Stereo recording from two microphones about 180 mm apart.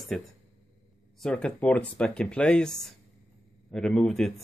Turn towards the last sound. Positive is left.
turn(degrees=0)  # may be behind; listen again after turning